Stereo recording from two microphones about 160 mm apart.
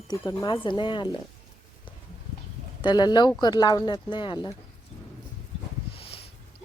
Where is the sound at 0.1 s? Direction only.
25° left (ahead or behind).